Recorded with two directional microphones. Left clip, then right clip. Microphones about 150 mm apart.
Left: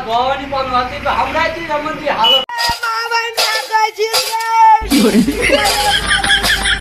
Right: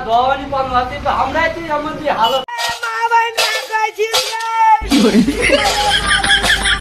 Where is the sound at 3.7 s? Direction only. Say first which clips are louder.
Left 5 dB; 20° right (ahead or behind).